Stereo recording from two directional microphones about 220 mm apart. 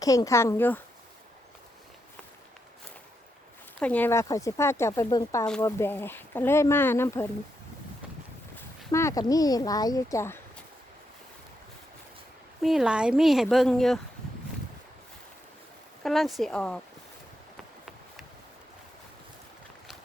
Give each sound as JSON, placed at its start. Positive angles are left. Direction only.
{"t": 0.0, "sound": "speech", "side_deg": 15}
{"t": 3.8, "sound": "speech", "side_deg": 5}
{"t": 8.9, "sound": "speech", "side_deg": 15}
{"t": 12.6, "sound": "speech", "side_deg": -5}
{"t": 16.0, "sound": "speech", "side_deg": 0}